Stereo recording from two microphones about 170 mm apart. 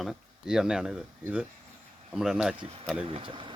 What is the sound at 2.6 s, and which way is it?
Speech, 30° right (ahead or behind).